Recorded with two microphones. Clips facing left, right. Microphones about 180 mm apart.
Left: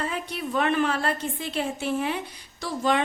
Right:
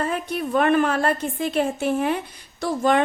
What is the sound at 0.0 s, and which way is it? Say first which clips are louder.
A woman's voice: right 5 dB; 50° right (ahead or behind).